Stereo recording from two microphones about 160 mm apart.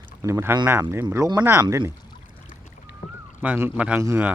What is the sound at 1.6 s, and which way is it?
Speech, 30° right (ahead or behind).